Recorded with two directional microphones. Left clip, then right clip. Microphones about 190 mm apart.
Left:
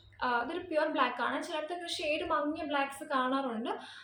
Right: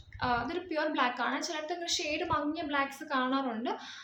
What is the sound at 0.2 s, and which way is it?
A woman's voice, 20° right (ahead or behind).